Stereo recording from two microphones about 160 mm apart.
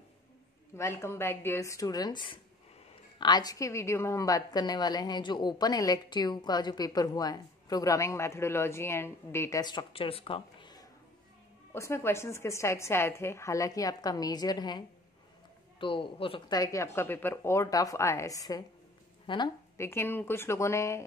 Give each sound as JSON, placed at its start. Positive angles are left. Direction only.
{"t": 0.7, "sound": "a woman's voice", "side_deg": 15}
{"t": 11.7, "sound": "a woman's voice", "side_deg": 15}
{"t": 15.8, "sound": "a woman's voice", "side_deg": 35}
{"t": 19.8, "sound": "a woman's voice", "side_deg": 15}